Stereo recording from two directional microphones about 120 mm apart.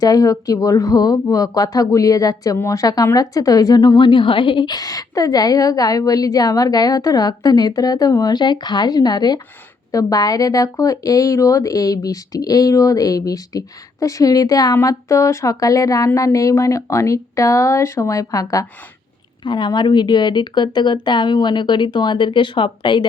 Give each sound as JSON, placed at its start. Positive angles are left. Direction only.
{"t": 0.0, "sound": "speech", "side_deg": 30}
{"t": 19.5, "sound": "speech", "side_deg": 40}